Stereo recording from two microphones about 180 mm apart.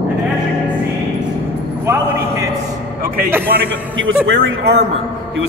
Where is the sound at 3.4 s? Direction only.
90° right.